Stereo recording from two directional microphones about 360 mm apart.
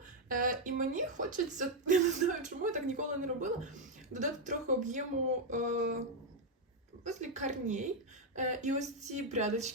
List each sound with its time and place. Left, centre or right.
0.3 s speech: right
7.0 s speech: centre